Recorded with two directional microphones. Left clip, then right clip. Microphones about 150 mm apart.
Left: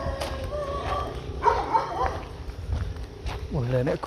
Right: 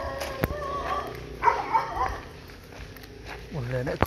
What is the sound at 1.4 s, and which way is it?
Dog, 90° left.